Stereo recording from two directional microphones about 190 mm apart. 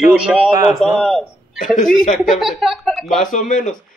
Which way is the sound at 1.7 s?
45° left (ahead or behind).